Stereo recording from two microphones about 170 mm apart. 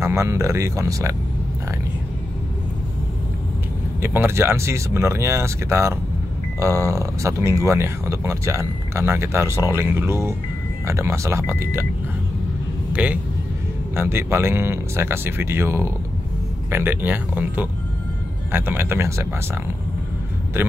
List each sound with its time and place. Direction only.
0.0 s speech: 15° right (ahead or behind)
4.0 s speech: 15° right (ahead or behind)
12.9 s speech: 10° right (ahead or behind)